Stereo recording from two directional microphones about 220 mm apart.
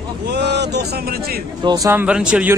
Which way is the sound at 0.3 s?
50° right (ahead or behind).